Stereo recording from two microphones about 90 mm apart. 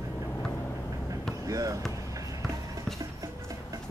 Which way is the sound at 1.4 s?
40° right (ahead or behind).